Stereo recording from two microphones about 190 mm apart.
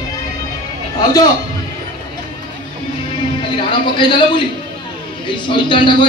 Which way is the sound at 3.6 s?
25° left (ahead or behind).